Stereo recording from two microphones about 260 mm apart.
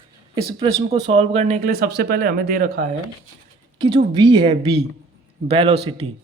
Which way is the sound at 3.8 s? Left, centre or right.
Centre.